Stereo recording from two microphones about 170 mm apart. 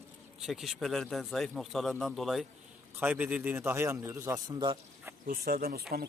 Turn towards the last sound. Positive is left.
turn(degrees=-60)  # may be behind; listen again after turning